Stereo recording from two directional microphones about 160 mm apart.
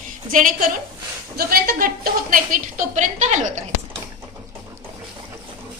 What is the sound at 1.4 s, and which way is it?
A woman's voice, 65° right (ahead or behind).